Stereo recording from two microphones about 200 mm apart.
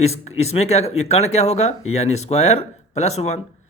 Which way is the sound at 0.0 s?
35° left (ahead or behind).